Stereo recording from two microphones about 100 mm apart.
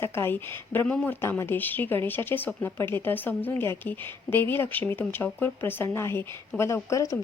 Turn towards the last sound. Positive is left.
turn(degrees=30)  # may be behind; listen again after turning